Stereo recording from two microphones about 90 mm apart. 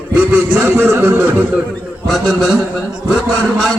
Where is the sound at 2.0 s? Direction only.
Centre (ahead or behind).